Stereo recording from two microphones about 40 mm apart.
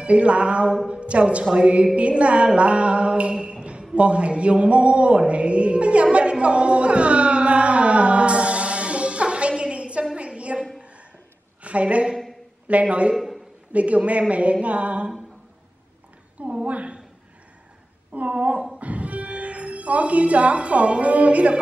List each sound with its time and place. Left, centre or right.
0.0 s music: right
3.9 s mantra: right
6.1 s music: right
9.5 s a sound: right
11.6 s a woman's voice: right
12.6 s mantra: right
13.1 s a man's voice: centre
13.7 s mantra: right
16.3 s a woman's voice: right
18.1 s mantra: right
18.8 s speech: right